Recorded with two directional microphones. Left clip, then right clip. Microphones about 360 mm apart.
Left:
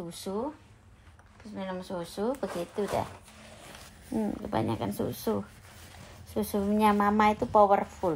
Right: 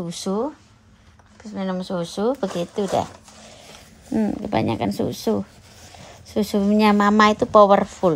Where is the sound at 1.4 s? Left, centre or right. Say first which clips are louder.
Right 9 dB; right.